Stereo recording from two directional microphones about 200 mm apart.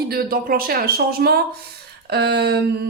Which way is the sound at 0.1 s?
50° right (ahead or behind).